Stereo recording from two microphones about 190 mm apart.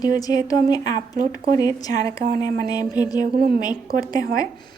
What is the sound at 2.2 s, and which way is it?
Speech, 45° right (ahead or behind).